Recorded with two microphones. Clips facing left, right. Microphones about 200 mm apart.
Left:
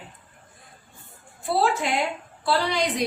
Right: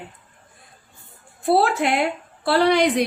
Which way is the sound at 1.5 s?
60° right (ahead or behind).